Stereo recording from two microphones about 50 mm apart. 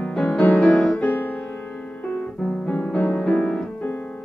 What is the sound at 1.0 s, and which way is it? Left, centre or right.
Music, left.